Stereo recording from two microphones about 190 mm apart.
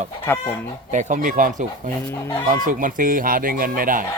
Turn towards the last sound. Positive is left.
turn(degrees=-45)  # may be behind; listen again after turning